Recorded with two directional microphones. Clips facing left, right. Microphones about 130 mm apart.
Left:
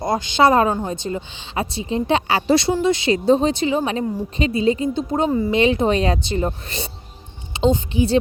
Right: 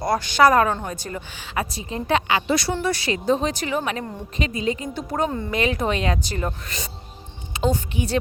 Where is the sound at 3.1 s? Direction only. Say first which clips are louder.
Left 5 dB; 30° left (ahead or behind).